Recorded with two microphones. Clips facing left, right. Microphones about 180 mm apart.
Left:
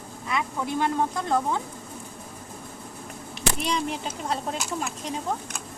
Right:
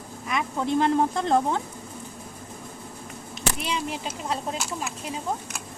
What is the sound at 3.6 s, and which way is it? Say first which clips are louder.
Speech: left 4 dB; 5° right (ahead or behind).